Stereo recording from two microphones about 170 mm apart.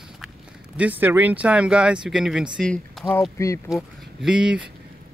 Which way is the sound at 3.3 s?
15° left (ahead or behind).